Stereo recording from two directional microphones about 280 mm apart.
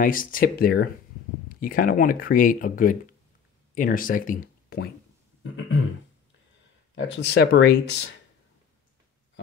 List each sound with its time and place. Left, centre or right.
0.0 s speech: left
7.0 s speech: left